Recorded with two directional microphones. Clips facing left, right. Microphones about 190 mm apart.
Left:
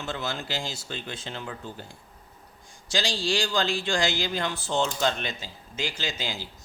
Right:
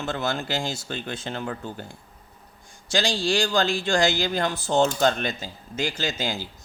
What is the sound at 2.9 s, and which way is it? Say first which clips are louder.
Speech: right 4 dB; 50° right (ahead or behind).